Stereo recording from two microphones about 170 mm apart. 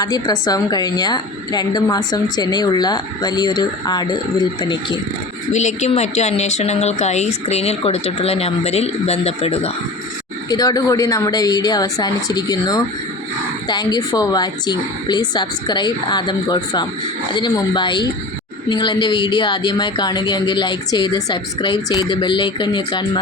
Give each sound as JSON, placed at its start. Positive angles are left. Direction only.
{"t": 0.0, "sound": "a woman's voice", "side_deg": 20}
{"t": 5.5, "sound": "speech", "side_deg": 45}
{"t": 10.5, "sound": "a woman's voice", "side_deg": 25}